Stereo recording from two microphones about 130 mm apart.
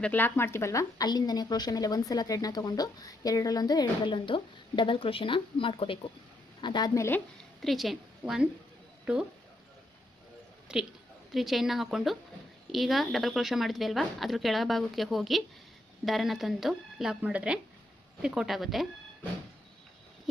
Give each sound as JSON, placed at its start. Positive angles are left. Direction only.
{"t": 0.0, "sound": "a woman's voice", "side_deg": 15}
{"t": 7.6, "sound": "a woman's voice", "side_deg": 0}
{"t": 10.7, "sound": "speech", "side_deg": -5}